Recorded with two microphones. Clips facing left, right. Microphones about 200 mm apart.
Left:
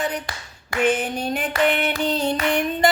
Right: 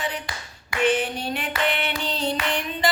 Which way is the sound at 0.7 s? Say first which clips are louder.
Left 1 dB; 45° left (ahead or behind).